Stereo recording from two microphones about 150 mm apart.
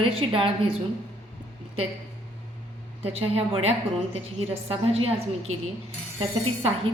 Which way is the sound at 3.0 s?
40° right (ahead or behind).